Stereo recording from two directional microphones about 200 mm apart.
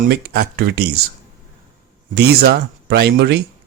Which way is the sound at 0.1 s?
55° right (ahead or behind).